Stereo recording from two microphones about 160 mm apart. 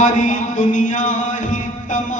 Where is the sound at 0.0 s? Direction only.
50° left (ahead or behind).